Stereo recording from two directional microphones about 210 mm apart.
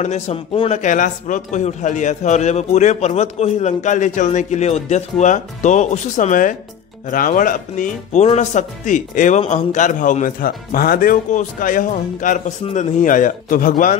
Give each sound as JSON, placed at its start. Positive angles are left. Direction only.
{"t": 0.0, "sound": "speech", "side_deg": 30}